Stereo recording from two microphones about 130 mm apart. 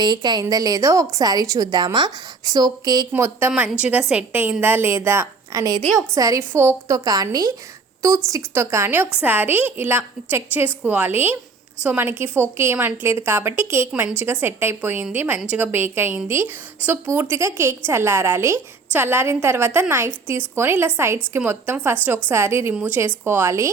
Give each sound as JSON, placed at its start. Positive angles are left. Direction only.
{"t": 0.0, "sound": "a woman's voice", "side_deg": -35}
{"t": 3.1, "sound": "a woman's voice", "side_deg": -20}
{"t": 3.5, "sound": "a woman's voice", "side_deg": -5}